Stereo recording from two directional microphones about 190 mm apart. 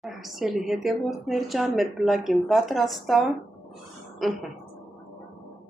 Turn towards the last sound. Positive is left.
turn(degrees=0)  # may be behind; listen again after turning